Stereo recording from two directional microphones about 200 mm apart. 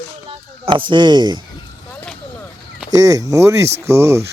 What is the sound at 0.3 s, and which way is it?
Speech, 25° right (ahead or behind).